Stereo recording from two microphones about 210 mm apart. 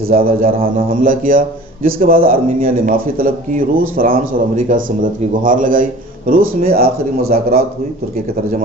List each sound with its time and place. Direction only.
0.1 s a man's voice: 45° right (ahead or behind)